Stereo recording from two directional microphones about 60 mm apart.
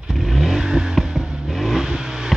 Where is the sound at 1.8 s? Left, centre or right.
Centre.